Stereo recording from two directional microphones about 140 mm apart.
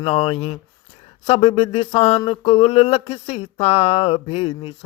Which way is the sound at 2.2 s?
40° left (ahead or behind).